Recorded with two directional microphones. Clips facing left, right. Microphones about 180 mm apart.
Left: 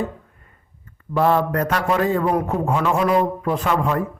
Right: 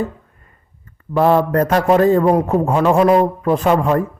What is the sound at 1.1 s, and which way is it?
A man's voice, 40° right (ahead or behind).